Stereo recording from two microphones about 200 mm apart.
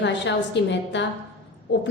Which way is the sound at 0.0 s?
65° left (ahead or behind).